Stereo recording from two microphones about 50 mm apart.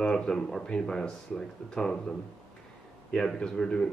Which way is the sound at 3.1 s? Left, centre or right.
Centre.